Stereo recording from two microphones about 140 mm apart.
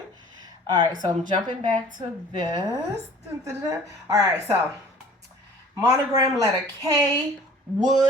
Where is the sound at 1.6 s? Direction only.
65° right (ahead or behind).